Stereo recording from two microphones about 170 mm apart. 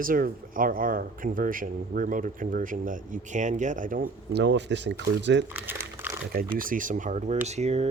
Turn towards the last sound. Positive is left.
turn(degrees=-40)  # may be behind; listen again after turning